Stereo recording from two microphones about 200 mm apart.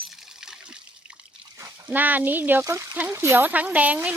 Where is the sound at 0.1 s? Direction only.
Centre (ahead or behind).